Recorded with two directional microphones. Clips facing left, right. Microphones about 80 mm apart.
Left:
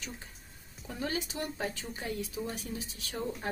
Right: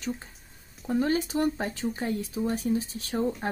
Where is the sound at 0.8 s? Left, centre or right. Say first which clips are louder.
Right 10 dB; right.